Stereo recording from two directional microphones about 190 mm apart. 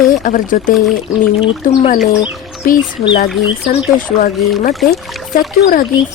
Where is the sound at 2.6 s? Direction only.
45° left (ahead or behind).